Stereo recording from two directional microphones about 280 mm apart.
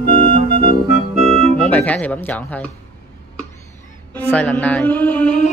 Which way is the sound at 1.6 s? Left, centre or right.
Centre.